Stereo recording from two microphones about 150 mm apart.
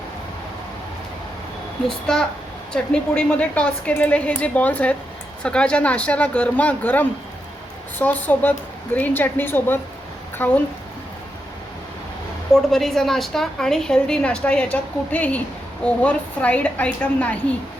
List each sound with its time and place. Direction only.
1.9 s a woman's voice: 5° left (ahead or behind)
12.7 s a woman's voice: centre (ahead or behind)